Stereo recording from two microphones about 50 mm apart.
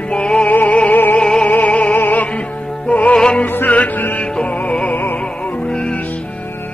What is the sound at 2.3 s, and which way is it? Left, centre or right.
Music, left.